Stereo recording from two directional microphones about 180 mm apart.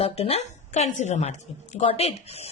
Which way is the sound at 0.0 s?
35° left (ahead or behind).